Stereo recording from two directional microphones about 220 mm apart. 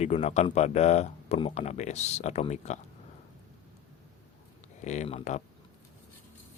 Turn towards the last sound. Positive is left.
turn(degrees=30)  # may be behind; listen again after turning